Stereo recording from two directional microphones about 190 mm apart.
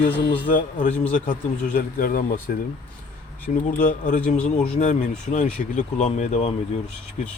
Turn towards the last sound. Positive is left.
turn(degrees=35)  # may be behind; listen again after turning